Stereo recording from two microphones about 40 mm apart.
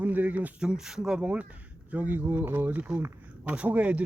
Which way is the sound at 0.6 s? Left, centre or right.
Centre.